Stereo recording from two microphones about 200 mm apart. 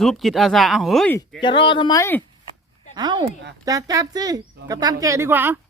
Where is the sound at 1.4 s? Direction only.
25° left (ahead or behind).